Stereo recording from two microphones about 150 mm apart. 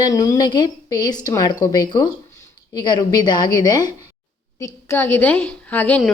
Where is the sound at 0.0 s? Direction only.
20° left (ahead or behind).